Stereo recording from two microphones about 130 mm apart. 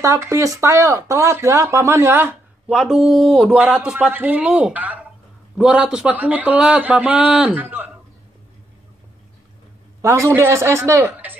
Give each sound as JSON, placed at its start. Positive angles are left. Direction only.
{"t": 0.0, "sound": "speech", "side_deg": -25}
{"t": 2.8, "sound": "speech", "side_deg": -5}
{"t": 3.5, "sound": "a man's voice", "side_deg": -10}
{"t": 10.0, "sound": "speech", "side_deg": -20}